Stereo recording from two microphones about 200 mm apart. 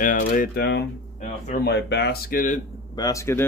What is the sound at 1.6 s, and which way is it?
Speech, 55° left (ahead or behind).